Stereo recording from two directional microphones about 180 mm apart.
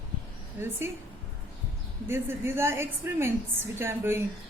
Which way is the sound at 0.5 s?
15° right (ahead or behind).